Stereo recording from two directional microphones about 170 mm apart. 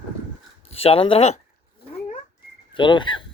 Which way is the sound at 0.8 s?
35° left (ahead or behind).